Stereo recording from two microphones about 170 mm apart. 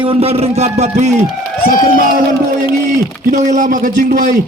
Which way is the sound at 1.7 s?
55° left (ahead or behind).